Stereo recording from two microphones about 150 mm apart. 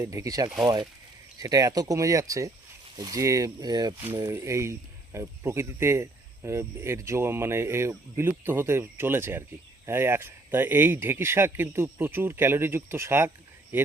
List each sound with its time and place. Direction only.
0.0 s speech: 20° right (ahead or behind)